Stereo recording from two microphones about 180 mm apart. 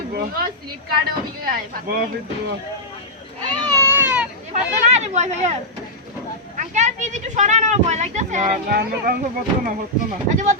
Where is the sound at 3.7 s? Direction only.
15° right (ahead or behind).